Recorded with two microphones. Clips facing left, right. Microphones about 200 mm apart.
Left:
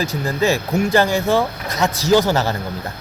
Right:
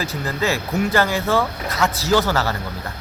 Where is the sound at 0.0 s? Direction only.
15° left (ahead or behind).